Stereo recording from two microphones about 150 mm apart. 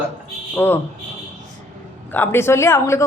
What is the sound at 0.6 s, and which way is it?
Speech, 15° left (ahead or behind).